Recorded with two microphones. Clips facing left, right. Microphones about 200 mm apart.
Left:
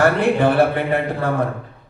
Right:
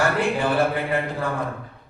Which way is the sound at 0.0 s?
60° left (ahead or behind).